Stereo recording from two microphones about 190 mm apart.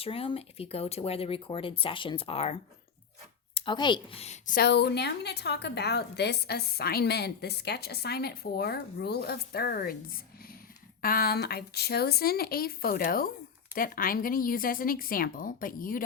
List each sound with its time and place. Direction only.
0.0 s a woman's voice: 30° left (ahead or behind); by 16.0 s 45° left (ahead or behind)